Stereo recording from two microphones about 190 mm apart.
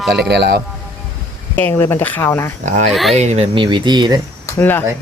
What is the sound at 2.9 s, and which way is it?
Speech, centre (ahead or behind).